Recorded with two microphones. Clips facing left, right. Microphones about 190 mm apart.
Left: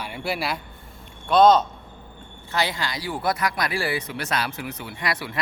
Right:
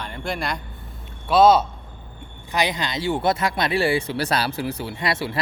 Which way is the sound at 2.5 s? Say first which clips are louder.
Right 3 dB; 20° right (ahead or behind).